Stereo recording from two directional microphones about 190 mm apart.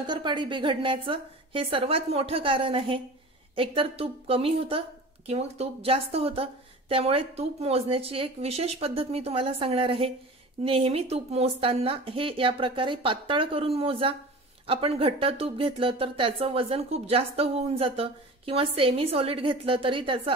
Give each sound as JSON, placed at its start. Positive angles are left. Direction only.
{"t": 0.0, "sound": "a woman's voice", "side_deg": -25}